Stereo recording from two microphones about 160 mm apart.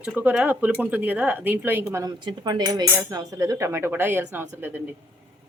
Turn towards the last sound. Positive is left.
turn(degrees=-15)  # may be behind; listen again after turning